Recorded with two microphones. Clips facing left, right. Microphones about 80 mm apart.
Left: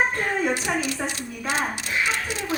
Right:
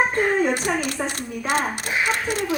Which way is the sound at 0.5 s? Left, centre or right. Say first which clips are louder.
Right 2 dB; right.